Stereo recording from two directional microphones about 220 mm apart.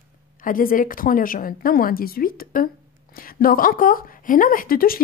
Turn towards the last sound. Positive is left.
turn(degrees=40)  # may be behind; listen again after turning